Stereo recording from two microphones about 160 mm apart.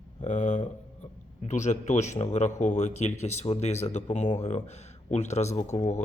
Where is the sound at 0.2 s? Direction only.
50° left (ahead or behind).